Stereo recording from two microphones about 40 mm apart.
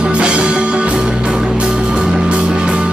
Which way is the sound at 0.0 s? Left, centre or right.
Right.